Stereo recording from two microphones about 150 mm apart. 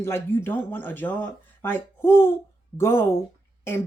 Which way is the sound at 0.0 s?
15° left (ahead or behind).